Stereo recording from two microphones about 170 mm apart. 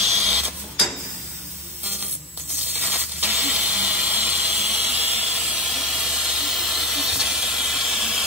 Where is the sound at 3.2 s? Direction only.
10° right (ahead or behind).